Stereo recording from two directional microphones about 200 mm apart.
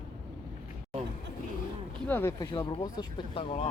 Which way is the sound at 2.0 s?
10° left (ahead or behind).